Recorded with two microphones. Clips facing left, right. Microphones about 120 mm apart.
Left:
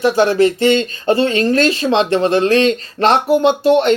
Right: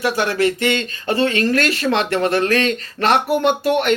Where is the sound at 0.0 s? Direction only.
30° left (ahead or behind).